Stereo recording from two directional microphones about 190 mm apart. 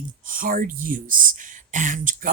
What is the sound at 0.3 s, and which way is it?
Speech, 45° right (ahead or behind).